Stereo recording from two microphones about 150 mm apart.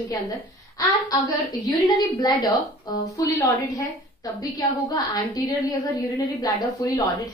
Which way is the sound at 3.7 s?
25° left (ahead or behind).